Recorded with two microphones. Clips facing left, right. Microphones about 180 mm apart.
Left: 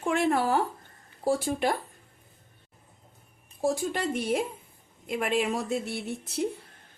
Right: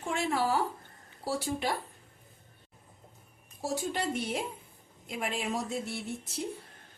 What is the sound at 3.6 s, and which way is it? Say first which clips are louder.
Speech: left 5 dB; 50° left (ahead or behind).